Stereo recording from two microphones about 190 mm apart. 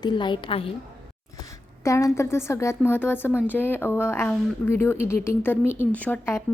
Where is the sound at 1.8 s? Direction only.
15° left (ahead or behind).